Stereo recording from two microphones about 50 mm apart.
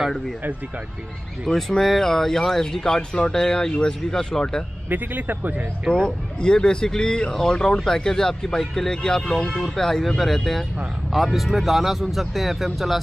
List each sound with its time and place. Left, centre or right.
1.5 s speech: centre
4.8 s a man's voice: right
5.9 s speech: centre